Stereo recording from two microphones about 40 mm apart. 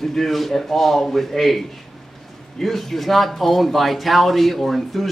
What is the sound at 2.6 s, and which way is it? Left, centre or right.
A man's voice, centre.